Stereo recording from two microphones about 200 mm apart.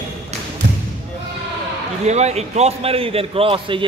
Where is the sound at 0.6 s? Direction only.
60° right (ahead or behind).